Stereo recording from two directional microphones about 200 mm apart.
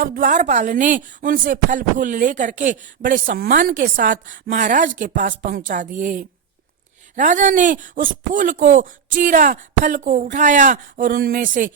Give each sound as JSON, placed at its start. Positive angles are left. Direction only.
{"t": 0.0, "sound": "speech", "side_deg": -45}